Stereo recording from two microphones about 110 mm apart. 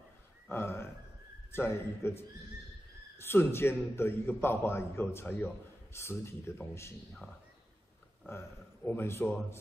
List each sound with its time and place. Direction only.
0.5 s a man's voice: 20° left (ahead or behind)
8.3 s a man's voice: 20° left (ahead or behind)